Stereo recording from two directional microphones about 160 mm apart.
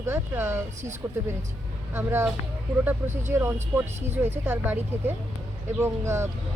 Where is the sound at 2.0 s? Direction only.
15° right (ahead or behind).